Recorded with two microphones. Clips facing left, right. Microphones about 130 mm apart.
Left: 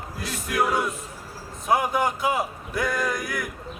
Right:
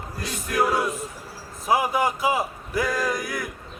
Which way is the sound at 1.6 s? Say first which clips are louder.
Right 1 dB; 5° right (ahead or behind).